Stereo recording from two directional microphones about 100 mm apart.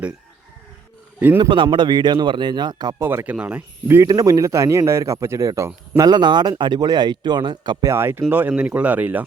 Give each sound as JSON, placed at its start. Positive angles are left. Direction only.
{"t": 1.4, "sound": "speech", "side_deg": -55}
{"t": 3.0, "sound": "speech", "side_deg": -25}
{"t": 3.2, "sound": "speech", "side_deg": -15}
{"t": 4.0, "sound": "speech", "side_deg": -35}
{"t": 6.1, "sound": "speech", "side_deg": -45}
{"t": 7.9, "sound": "speech", "side_deg": -25}